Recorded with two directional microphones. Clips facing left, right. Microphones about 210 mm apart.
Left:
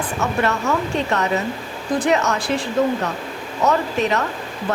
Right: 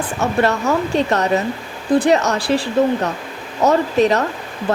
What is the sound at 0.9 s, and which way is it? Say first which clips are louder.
Speech: right 4 dB; 35° right (ahead or behind).